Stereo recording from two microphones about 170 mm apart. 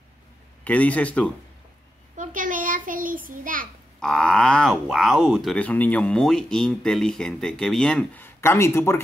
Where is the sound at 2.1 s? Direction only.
50° right (ahead or behind).